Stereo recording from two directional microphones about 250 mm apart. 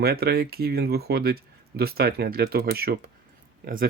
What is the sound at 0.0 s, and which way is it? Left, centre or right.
Speech, right.